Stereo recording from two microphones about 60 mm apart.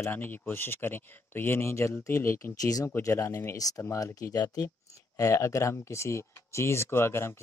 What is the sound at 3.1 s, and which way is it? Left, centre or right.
Speech, left.